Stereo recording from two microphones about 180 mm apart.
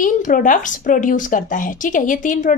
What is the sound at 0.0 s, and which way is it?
A woman's voice, 50° left (ahead or behind).